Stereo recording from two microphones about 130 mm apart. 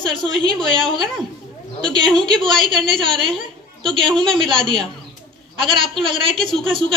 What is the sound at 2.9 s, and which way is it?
Speech, 40° right (ahead or behind).